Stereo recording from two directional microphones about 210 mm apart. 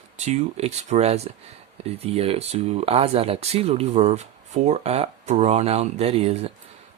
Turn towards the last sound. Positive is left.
turn(degrees=-30)  # may be behind; listen again after turning